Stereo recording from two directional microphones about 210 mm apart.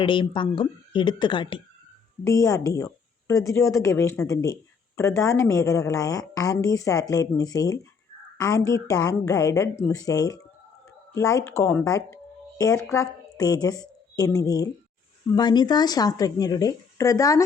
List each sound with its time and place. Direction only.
0.0 s a woman's voice: 25° left (ahead or behind)